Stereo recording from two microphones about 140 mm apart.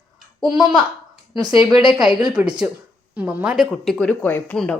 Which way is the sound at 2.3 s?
5° right (ahead or behind).